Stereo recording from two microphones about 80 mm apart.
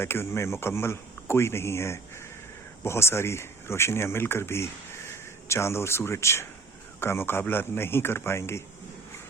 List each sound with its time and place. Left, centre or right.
0.0 s a man's voice: left